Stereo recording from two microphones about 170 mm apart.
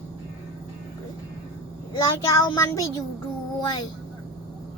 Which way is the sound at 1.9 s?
20° left (ahead or behind).